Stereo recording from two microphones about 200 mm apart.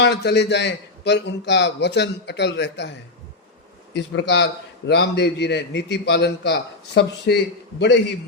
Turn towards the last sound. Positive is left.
turn(degrees=55)  # may be behind; listen again after turning